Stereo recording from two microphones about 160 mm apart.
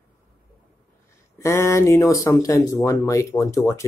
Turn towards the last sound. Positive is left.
turn(degrees=20)  # may be behind; listen again after turning